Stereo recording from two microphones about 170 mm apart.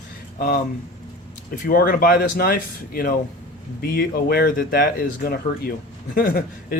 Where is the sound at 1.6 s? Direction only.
60° left (ahead or behind).